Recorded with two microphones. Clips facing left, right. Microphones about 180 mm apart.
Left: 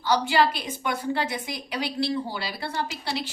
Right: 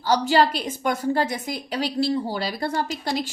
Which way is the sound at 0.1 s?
45° right (ahead or behind).